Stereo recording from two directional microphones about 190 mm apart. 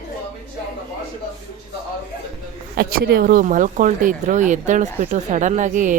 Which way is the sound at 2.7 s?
55° right (ahead or behind).